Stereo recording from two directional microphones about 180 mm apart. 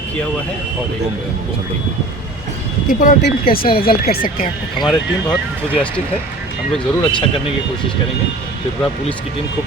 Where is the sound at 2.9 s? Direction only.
50° left (ahead or behind).